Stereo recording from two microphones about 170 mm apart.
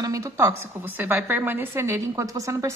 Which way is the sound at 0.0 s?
20° right (ahead or behind).